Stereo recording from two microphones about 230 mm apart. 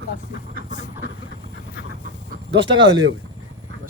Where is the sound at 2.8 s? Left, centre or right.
Right.